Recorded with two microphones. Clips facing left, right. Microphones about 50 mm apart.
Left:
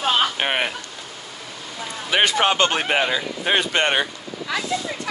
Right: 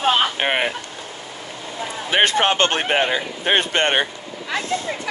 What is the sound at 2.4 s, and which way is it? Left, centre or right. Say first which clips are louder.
Speech: right 1 dB; right.